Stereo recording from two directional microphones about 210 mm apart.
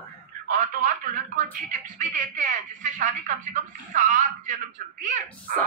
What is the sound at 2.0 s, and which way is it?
Speech, 40° right (ahead or behind).